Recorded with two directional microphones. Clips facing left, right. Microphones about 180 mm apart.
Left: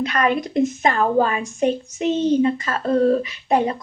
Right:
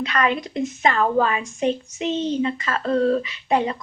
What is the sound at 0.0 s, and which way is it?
A woman's voice, 45° left (ahead or behind).